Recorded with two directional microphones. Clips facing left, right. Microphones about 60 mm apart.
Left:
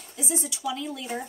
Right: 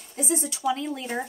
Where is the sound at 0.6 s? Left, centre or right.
Right.